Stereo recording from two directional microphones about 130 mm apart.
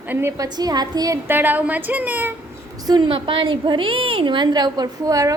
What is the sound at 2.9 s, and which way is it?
A woman's voice, 40° right (ahead or behind).